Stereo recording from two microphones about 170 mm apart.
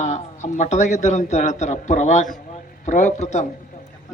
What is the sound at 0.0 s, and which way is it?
A man's voice, 45° left (ahead or behind).